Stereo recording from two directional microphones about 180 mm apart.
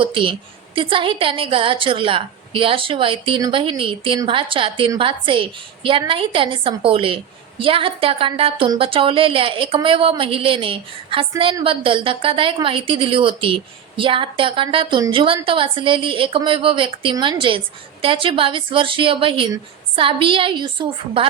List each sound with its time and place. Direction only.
0.0 s speech: 30° right (ahead or behind)